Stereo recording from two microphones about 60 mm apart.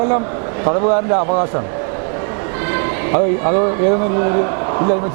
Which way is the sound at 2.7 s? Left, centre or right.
Right.